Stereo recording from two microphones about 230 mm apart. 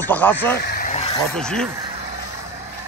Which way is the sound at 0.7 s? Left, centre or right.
Left.